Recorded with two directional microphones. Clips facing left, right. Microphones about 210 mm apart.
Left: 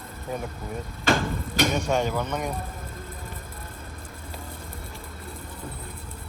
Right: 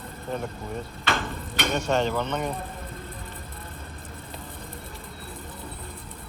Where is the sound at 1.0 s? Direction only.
45° left (ahead or behind).